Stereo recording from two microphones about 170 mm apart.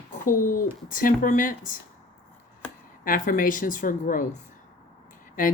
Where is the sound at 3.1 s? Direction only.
50° left (ahead or behind).